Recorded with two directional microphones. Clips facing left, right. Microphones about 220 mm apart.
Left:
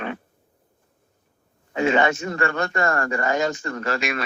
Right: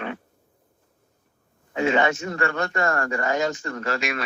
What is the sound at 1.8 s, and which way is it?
Speech, 50° left (ahead or behind).